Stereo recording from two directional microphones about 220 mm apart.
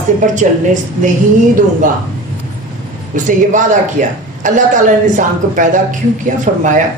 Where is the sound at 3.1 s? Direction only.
35° right (ahead or behind).